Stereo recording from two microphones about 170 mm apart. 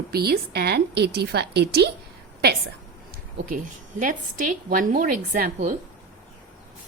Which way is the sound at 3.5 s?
55° right (ahead or behind).